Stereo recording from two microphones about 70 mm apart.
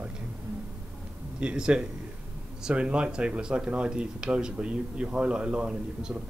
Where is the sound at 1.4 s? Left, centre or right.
Centre.